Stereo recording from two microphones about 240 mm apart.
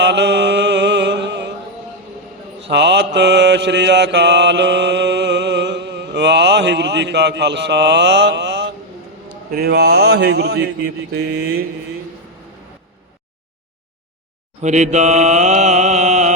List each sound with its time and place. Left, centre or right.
0.0 s mantra: right
2.6 s mantra: right
14.6 s mantra: right